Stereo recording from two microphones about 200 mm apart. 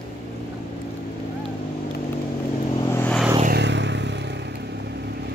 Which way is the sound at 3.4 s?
55° right (ahead or behind).